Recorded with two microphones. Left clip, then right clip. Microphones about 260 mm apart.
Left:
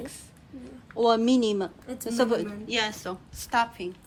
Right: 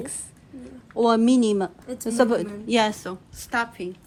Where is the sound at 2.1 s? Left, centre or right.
Centre.